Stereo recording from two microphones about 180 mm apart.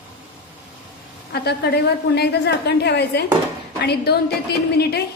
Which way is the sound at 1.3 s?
65° left (ahead or behind).